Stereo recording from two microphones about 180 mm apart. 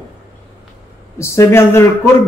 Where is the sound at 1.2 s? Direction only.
15° left (ahead or behind).